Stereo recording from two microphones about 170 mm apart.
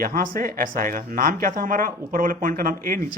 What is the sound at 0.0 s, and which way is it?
Speech, 55° right (ahead or behind).